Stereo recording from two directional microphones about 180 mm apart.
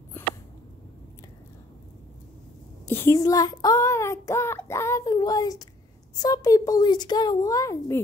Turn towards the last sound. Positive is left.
turn(degrees=15)  # may be behind; listen again after turning